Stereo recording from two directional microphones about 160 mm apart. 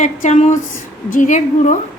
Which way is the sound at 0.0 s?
50° left (ahead or behind).